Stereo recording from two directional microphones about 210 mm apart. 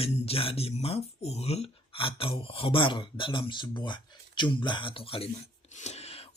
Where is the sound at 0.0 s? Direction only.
25° left (ahead or behind).